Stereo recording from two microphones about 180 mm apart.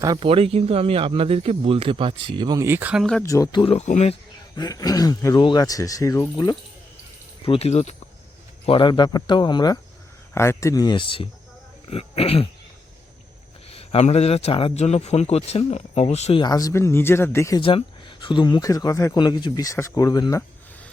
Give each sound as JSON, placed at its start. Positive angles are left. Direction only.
{"t": 0.2, "sound": "speech", "side_deg": -30}
{"t": 3.0, "sound": "speech", "side_deg": 5}
{"t": 3.2, "sound": "a man's voice", "side_deg": 20}
{"t": 4.5, "sound": "a man's voice", "side_deg": 20}
{"t": 13.7, "sound": "a man's voice", "side_deg": 35}
{"t": 16.4, "sound": "speech", "side_deg": 20}
{"t": 17.6, "sound": "speech", "side_deg": 30}